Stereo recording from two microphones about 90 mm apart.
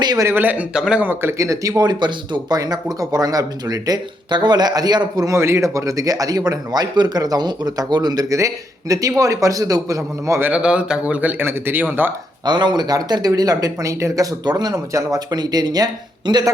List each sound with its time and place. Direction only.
0.0 s speech: 50° right (ahead or behind)
0.3 s speech: 20° right (ahead or behind)
1.0 s speech: 25° right (ahead or behind); by 2.6 s 60° right (ahead or behind)
2.6 s speech: 45° right (ahead or behind)
10.4 s speech: 10° right (ahead or behind)
12.5 s speech: 55° right (ahead or behind)